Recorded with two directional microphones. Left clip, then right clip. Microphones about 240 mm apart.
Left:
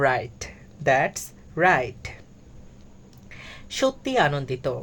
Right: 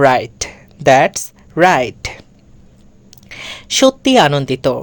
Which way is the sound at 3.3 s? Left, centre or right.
Right.